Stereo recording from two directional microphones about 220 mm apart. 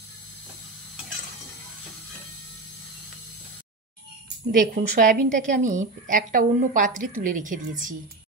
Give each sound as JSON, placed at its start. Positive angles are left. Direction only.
{"t": 4.6, "sound": "a woman's voice", "side_deg": -40}